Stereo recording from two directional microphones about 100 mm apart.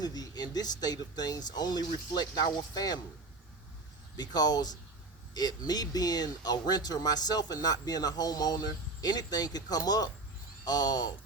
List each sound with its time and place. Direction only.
0.0 s speech: 40° left (ahead or behind)
4.2 s speech: 45° left (ahead or behind)